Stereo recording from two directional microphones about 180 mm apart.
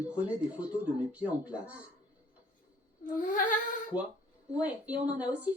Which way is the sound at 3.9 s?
25° left (ahead or behind).